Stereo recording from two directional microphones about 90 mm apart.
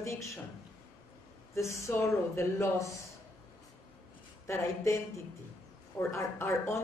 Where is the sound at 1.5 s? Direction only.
35° left (ahead or behind).